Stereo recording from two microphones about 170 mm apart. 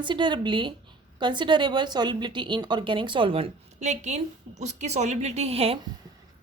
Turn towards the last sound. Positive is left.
turn(degrees=-35)  # may be behind; listen again after turning